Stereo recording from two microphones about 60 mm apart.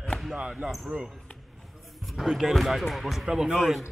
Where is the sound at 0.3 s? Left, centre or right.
Centre.